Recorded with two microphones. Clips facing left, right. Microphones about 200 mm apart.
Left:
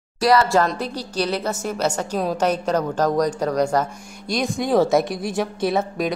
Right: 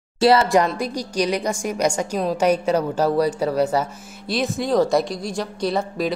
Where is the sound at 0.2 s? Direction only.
25° right (ahead or behind).